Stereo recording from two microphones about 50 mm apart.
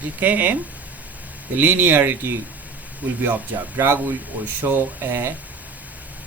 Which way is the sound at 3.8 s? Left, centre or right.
Right.